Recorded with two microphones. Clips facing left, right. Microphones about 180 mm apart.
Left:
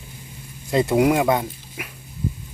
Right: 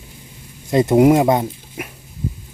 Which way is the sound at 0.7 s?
20° right (ahead or behind).